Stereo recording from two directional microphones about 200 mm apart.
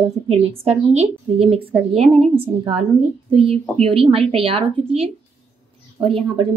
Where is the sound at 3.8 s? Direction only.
25° right (ahead or behind).